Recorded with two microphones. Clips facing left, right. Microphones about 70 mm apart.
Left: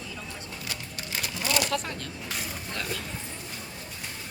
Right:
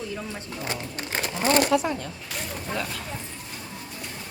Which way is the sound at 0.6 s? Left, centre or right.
Right.